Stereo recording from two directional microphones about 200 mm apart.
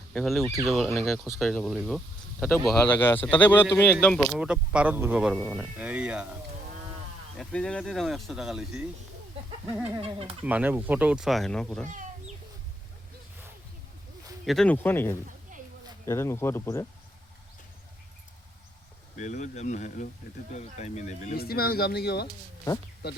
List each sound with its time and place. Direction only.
0.1 s speech: centre (ahead or behind)
5.4 s speech: 5° left (ahead or behind)
5.7 s speech: 5° right (ahead or behind)
7.3 s speech: 5° left (ahead or behind)
10.0 s speech: 30° right (ahead or behind)
10.4 s speech: 5° right (ahead or behind)
14.4 s speech: centre (ahead or behind)
19.1 s speech: 35° left (ahead or behind)
21.3 s speech: 50° left (ahead or behind)